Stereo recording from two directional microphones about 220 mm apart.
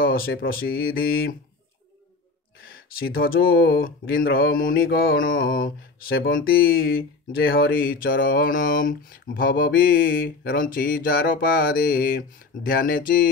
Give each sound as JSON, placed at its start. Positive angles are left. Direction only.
{"t": 0.0, "sound": "speech", "side_deg": 40}
{"t": 2.6, "sound": "speech", "side_deg": 45}
{"t": 4.2, "sound": "mantra", "side_deg": 45}